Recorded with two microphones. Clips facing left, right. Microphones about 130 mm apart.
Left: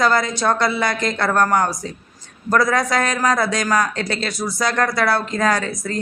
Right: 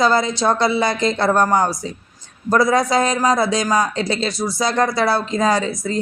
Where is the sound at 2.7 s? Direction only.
30° right (ahead or behind).